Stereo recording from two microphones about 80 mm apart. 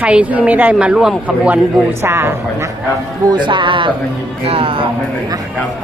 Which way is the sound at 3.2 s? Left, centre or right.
Right.